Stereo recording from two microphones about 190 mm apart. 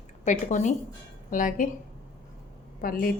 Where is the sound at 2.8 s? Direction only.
50° left (ahead or behind).